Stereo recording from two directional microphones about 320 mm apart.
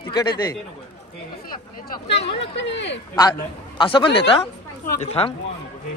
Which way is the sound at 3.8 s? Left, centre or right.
Centre.